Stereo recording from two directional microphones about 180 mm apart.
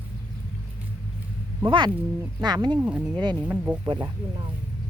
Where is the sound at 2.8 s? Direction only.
10° right (ahead or behind).